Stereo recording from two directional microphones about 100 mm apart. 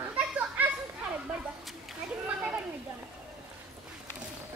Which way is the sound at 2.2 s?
15° right (ahead or behind).